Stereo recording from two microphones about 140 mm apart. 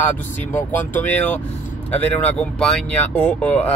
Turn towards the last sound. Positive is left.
turn(degrees=10)  # may be behind; listen again after turning